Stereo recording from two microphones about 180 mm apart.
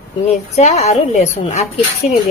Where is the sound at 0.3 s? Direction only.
40° left (ahead or behind).